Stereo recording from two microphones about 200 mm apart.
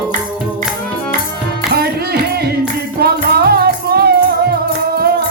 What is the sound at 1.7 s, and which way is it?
Music, 50° right (ahead or behind).